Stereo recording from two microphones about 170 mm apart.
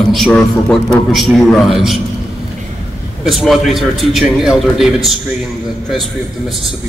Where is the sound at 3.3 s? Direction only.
Centre (ahead or behind).